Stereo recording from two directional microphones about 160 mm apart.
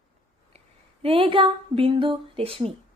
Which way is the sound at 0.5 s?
40° right (ahead or behind).